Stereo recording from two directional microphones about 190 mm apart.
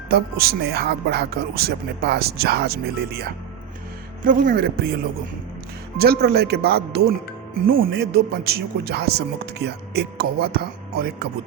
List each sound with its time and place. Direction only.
0.1 s speech: 55° right (ahead or behind)
4.2 s speech: 45° right (ahead or behind)
6.0 s speech: 60° right (ahead or behind)